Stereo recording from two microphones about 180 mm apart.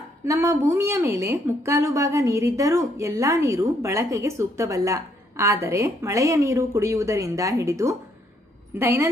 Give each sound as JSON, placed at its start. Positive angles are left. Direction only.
{"t": 0.3, "sound": "a woman's voice", "side_deg": -15}